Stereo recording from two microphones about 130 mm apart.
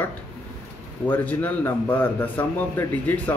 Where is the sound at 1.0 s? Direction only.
15° left (ahead or behind).